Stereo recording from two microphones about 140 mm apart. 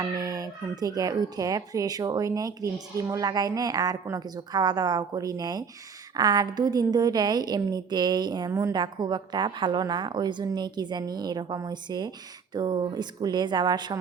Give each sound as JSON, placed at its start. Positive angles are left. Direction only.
{"t": 0.0, "sound": "a woman's voice", "side_deg": -25}